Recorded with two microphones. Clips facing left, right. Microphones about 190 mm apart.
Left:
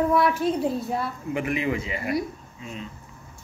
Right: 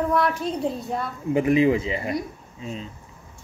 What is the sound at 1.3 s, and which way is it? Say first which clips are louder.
Speech: right 9 dB; 30° right (ahead or behind).